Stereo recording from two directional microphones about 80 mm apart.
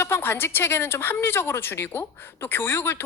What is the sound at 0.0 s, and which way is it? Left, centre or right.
Speech, left.